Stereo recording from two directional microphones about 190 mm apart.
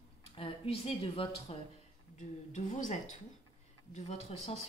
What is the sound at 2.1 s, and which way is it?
A woman's voice, 40° left (ahead or behind).